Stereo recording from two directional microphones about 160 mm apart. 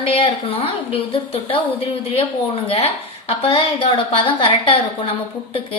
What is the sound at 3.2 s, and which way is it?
A woman's voice, 35° left (ahead or behind).